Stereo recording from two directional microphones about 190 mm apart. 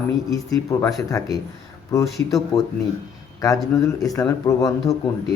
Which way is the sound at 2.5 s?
Centre (ahead or behind).